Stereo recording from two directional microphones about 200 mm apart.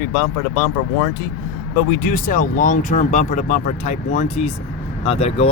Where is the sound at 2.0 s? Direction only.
45° left (ahead or behind).